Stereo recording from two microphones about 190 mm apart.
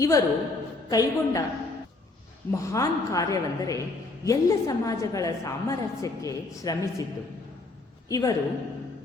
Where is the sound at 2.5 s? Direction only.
15° left (ahead or behind).